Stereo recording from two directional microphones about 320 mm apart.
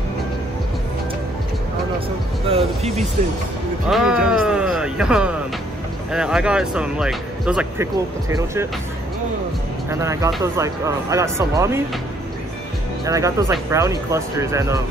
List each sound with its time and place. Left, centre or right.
2.4 s speech: centre
3.9 s speech: centre
9.8 s speech: centre
13.0 s speech: centre